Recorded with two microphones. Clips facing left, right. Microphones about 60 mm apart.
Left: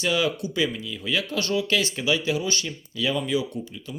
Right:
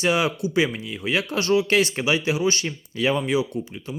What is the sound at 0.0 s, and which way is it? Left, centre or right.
Speech, right.